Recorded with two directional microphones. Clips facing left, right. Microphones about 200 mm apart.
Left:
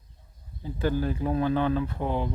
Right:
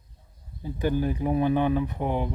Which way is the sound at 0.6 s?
15° right (ahead or behind).